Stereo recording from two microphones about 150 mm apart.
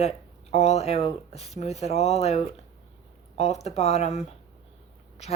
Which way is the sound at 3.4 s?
45° left (ahead or behind).